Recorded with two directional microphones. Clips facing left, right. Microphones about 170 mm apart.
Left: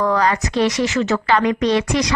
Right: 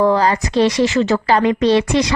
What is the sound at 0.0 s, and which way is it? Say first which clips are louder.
A woman's voice: right 3 dB; 30° right (ahead or behind).